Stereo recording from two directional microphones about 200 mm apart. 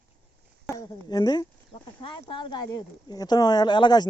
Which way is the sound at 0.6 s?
20° left (ahead or behind).